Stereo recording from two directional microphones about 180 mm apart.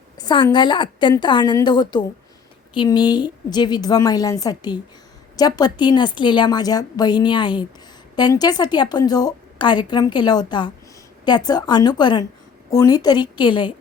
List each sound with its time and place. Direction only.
0.2 s a woman's voice: 20° left (ahead or behind)